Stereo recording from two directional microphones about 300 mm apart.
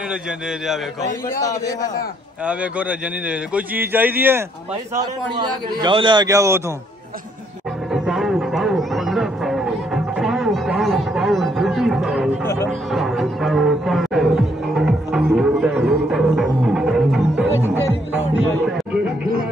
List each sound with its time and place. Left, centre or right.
1.4 s a man's voice: centre
2.4 s a man's voice: centre
7.9 s music: centre